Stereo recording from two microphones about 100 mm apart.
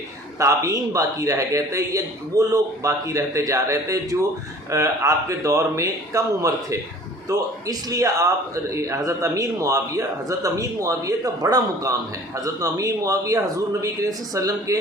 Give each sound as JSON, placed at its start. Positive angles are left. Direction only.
{"t": 0.3, "sound": "speech", "side_deg": -30}